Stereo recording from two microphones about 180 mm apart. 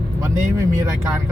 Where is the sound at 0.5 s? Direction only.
15° right (ahead or behind).